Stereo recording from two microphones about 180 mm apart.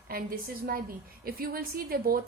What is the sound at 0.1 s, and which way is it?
A woman's voice, 55° right (ahead or behind).